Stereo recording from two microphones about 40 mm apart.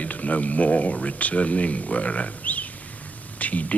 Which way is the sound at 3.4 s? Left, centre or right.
Left.